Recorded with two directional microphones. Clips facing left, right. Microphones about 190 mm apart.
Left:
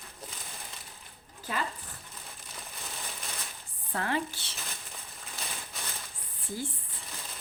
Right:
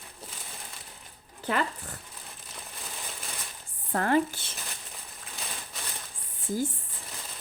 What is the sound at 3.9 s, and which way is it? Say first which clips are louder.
Speech: right 7 dB; 50° right (ahead or behind).